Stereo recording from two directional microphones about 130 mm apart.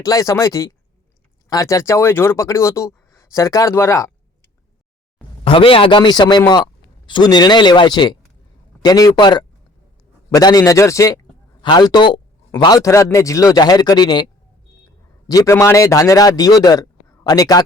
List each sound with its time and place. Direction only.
0.0 s speech: 25° left (ahead or behind)
5.5 s a man's voice: 45° left (ahead or behind)
15.3 s speech: 25° left (ahead or behind)